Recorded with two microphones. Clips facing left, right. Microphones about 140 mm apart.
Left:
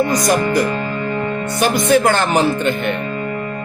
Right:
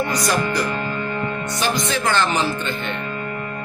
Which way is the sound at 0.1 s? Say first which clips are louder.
Left 5 dB; 50° left (ahead or behind).